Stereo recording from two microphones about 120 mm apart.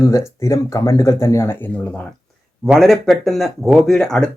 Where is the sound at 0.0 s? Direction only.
25° left (ahead or behind).